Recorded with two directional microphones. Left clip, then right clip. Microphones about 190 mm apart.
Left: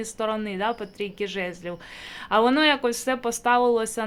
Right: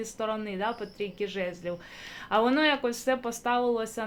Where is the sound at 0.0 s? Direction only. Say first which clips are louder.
Left 4 dB; 25° left (ahead or behind).